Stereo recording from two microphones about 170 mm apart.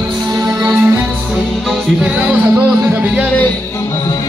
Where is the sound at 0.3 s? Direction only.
20° right (ahead or behind).